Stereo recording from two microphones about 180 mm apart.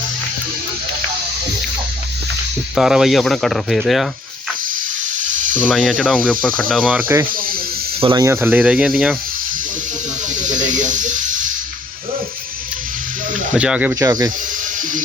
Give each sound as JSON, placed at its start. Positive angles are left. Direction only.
{"t": 2.7, "sound": "speech", "side_deg": 0}
{"t": 5.5, "sound": "speech", "side_deg": 5}
{"t": 8.0, "sound": "speech", "side_deg": -20}
{"t": 10.4, "sound": "snake", "side_deg": -45}
{"t": 13.5, "sound": "speech", "side_deg": -5}
{"t": 14.0, "sound": "speech", "side_deg": -20}